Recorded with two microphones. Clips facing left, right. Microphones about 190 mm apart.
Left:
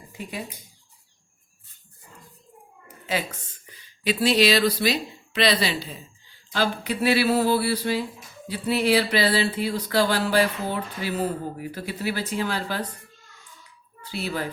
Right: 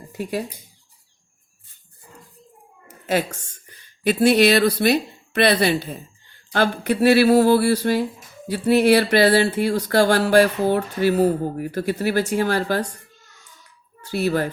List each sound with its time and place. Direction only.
0.1 s dishes: 45° right (ahead or behind)
2.8 s a woman's voice: 50° right (ahead or behind)
14.1 s speech: 45° right (ahead or behind)